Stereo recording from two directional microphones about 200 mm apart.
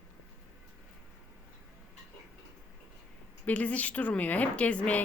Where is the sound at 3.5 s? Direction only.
5° left (ahead or behind).